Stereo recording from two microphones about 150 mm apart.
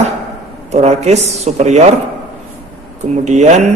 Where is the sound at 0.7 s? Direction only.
45° right (ahead or behind).